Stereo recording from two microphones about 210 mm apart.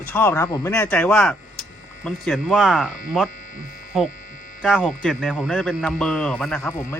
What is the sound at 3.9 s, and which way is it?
Speech, centre (ahead or behind).